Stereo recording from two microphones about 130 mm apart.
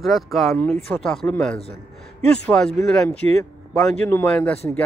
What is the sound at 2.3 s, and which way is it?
A man's voice, 10° left (ahead or behind).